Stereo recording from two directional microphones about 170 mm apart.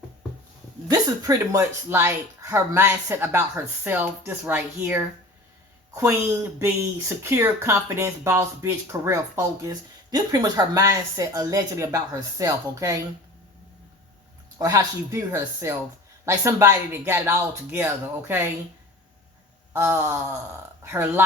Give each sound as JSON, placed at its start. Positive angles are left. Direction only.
{"t": 0.9, "sound": "speech", "side_deg": -20}
{"t": 14.6, "sound": "speech", "side_deg": -20}
{"t": 19.7, "sound": "speech", "side_deg": -15}